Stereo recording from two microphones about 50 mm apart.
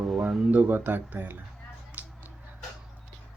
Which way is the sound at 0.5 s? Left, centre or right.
Right.